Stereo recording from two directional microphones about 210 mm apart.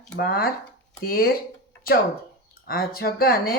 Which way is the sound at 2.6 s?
45° left (ahead or behind).